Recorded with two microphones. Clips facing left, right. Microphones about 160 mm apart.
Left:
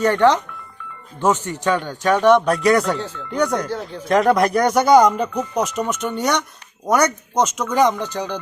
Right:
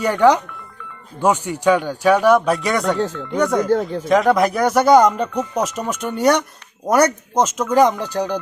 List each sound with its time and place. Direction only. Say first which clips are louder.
0.0 s speech: right 1 dB; 10° right (ahead or behind)
3.7 s speech: right 9 dB; 50° right (ahead or behind)
4.0 s speech: left 2 dB; centre (ahead or behind)